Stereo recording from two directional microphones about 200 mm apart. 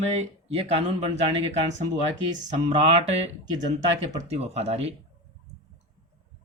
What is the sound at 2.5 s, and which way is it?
Speech, 30° right (ahead or behind).